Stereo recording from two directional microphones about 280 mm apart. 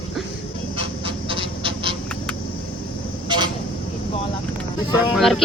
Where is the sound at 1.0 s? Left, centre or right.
Centre.